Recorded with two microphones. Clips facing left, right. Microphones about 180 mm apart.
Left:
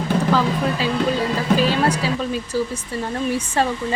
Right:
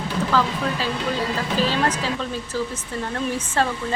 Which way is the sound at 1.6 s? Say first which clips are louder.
Left 3 dB; 10° left (ahead or behind).